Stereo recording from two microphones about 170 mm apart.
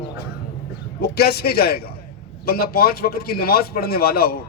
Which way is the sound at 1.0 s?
70° left (ahead or behind).